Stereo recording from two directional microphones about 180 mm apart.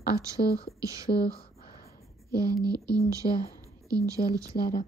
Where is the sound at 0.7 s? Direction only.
20° right (ahead or behind).